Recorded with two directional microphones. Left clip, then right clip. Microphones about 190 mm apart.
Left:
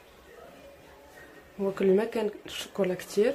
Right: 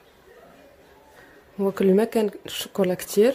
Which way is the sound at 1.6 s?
45° right (ahead or behind).